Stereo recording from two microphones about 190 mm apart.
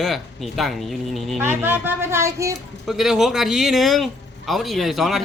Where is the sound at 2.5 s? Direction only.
Centre (ahead or behind).